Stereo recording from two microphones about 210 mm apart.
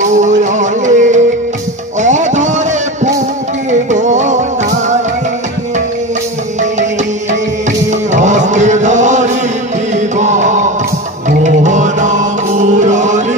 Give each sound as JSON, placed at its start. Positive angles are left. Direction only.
{"t": 0.1, "sound": "music", "side_deg": -35}
{"t": 8.1, "sound": "chant", "side_deg": -35}
{"t": 9.9, "sound": "music", "side_deg": -35}